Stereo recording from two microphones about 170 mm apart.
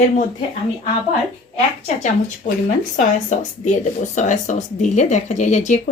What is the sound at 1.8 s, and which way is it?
Speech, 45° left (ahead or behind).